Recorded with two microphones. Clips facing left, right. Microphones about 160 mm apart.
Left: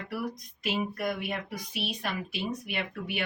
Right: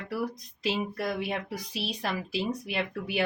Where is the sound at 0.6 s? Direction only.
30° right (ahead or behind).